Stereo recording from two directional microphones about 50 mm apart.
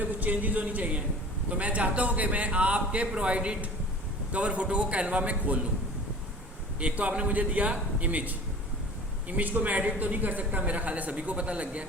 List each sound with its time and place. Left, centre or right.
0.0 s speech: right
6.7 s speech: right